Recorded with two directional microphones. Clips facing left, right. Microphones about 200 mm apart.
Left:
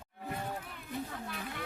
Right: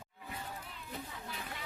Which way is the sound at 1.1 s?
55° left (ahead or behind).